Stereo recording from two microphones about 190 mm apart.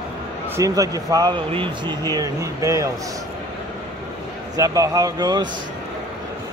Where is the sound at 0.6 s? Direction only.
20° right (ahead or behind).